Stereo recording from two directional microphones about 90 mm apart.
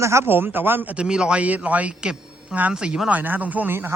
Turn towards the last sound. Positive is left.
turn(degrees=-25)  # may be behind; listen again after turning